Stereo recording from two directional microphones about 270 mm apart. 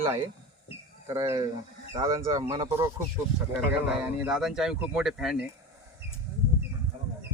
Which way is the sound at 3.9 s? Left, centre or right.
Centre.